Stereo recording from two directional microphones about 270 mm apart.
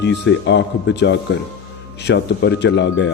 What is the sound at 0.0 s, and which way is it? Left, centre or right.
A man's voice, left.